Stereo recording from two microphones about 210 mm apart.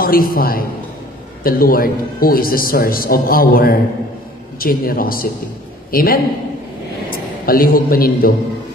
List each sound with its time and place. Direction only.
0.0 s a man's voice: 45° left (ahead or behind)